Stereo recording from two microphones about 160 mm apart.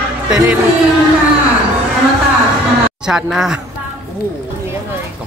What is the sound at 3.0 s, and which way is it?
Speech, 5° right (ahead or behind).